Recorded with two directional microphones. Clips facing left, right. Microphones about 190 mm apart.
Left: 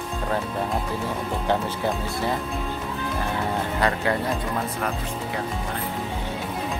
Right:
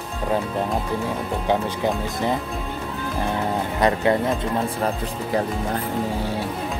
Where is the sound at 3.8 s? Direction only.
20° right (ahead or behind).